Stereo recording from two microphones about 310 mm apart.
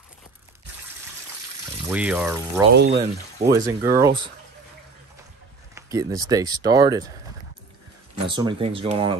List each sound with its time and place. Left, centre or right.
1.9 s speech: centre
2.7 s speech: right
3.5 s speech: centre
5.8 s speech: centre
8.3 s speech: centre